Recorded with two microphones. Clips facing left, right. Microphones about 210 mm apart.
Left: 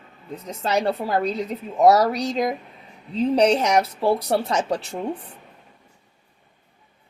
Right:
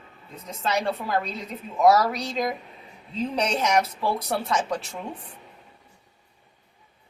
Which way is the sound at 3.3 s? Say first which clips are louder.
Left 5 dB; 35° left (ahead or behind).